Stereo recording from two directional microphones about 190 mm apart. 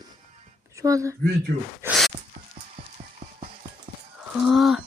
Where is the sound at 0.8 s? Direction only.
15° right (ahead or behind).